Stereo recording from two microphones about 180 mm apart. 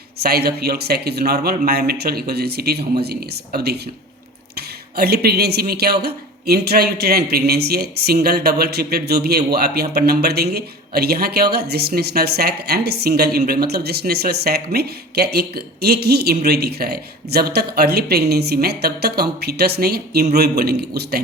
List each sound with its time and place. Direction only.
0.2 s speech: 60° right (ahead or behind)